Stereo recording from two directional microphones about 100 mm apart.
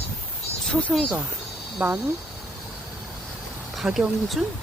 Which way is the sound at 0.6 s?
5° left (ahead or behind).